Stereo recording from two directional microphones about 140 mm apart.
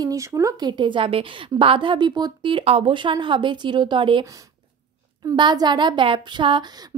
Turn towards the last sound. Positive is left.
turn(degrees=-35)  # may be behind; listen again after turning